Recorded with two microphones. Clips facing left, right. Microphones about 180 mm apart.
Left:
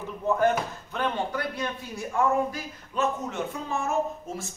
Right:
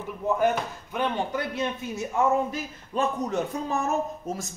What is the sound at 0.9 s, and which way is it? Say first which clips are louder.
A man's voice: right 1 dB; 20° right (ahead or behind).